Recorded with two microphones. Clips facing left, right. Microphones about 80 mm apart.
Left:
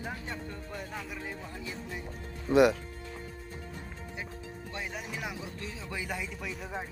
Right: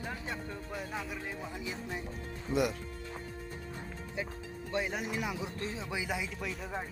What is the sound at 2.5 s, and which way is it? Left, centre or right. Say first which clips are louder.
Speech: left 9 dB; left.